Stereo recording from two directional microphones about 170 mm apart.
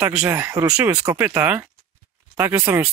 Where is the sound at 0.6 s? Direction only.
5° right (ahead or behind).